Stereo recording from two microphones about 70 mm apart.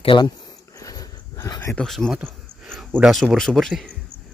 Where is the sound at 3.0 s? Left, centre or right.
Centre.